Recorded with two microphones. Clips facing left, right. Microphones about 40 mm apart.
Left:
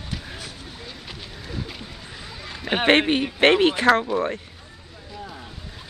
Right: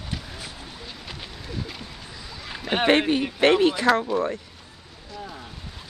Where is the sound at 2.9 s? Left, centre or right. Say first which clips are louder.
Left 2 dB; left.